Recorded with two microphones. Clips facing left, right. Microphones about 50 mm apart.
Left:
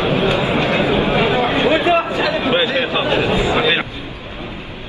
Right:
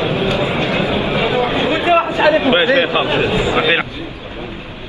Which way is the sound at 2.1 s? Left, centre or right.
Right.